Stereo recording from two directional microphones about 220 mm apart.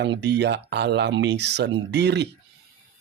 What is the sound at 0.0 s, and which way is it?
Speech, 50° right (ahead or behind).